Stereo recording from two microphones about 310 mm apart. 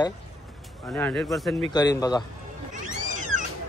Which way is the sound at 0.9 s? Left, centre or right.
Centre.